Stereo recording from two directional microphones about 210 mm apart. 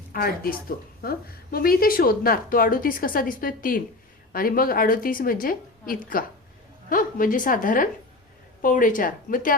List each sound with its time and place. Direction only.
0.1 s a woman's voice: 45° left (ahead or behind)